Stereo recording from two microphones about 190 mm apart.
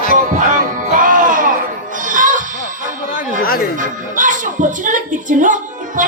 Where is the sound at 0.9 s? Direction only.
45° right (ahead or behind).